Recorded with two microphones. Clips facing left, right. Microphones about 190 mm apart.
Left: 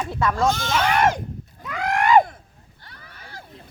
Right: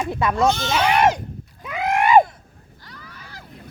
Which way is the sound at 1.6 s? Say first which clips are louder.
Right 2 dB; 20° right (ahead or behind).